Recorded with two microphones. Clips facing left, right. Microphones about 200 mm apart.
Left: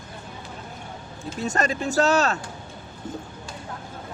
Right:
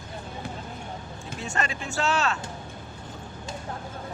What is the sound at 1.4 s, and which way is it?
Speech, 40° left (ahead or behind).